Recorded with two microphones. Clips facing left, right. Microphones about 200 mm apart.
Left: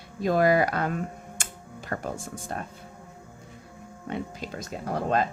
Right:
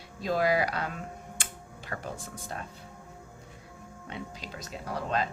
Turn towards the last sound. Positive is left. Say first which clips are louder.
# left 5 dB
turn(degrees=50)  # may be behind; listen again after turning